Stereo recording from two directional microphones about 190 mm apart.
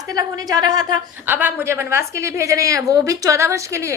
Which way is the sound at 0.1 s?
20° right (ahead or behind).